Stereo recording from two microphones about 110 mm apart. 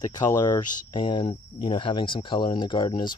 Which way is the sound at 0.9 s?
50° left (ahead or behind).